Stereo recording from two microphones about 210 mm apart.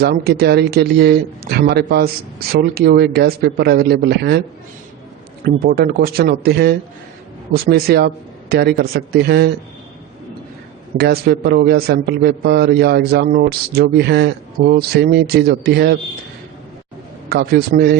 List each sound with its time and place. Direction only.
0.0 s speech: 50° right (ahead or behind)
5.5 s speech: 50° right (ahead or behind)
10.9 s speech: 50° right (ahead or behind)
17.2 s speech: 50° right (ahead or behind)